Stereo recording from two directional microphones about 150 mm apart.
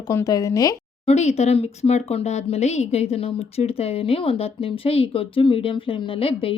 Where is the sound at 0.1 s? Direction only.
25° left (ahead or behind).